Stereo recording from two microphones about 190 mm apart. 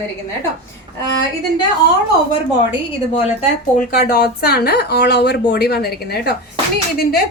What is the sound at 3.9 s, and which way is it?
A woman's voice, 55° left (ahead or behind).